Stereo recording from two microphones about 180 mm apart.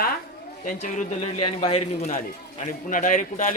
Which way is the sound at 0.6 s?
45° left (ahead or behind).